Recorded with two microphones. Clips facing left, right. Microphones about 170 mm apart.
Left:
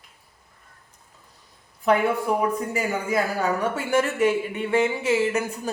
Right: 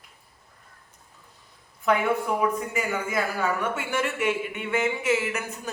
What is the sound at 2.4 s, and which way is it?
Speech, 35° left (ahead or behind).